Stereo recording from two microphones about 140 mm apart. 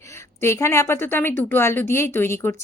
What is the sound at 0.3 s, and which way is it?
A woman's voice, 20° left (ahead or behind).